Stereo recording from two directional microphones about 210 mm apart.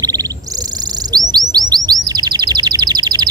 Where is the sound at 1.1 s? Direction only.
20° right (ahead or behind).